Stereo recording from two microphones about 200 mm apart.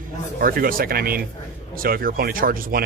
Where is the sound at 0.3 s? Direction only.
45° right (ahead or behind).